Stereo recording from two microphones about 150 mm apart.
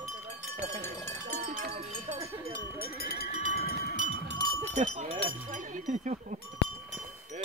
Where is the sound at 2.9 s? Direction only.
90° left.